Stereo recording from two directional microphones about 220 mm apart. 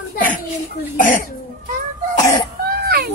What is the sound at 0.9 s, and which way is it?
Speech, 35° left (ahead or behind).